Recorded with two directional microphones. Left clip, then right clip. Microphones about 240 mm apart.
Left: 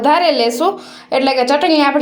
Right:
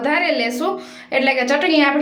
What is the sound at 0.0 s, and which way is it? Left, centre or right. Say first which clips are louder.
A woman's voice: left 6 dB; left.